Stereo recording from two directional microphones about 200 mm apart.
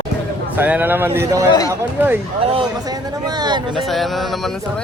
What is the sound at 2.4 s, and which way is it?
Speech, 25° right (ahead or behind).